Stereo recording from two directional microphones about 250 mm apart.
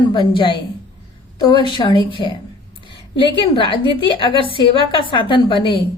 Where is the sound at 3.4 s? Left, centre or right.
Left.